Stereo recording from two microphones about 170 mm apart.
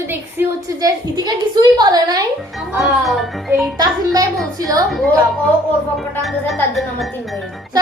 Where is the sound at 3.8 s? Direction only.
20° right (ahead or behind).